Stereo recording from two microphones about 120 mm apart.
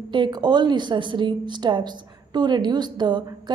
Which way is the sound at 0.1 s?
40° right (ahead or behind).